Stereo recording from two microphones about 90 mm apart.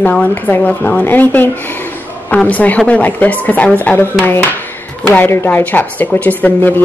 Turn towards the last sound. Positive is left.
turn(degrees=20)  # may be behind; listen again after turning